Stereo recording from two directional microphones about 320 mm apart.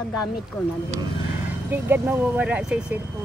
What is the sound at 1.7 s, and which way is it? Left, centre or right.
Speech, centre.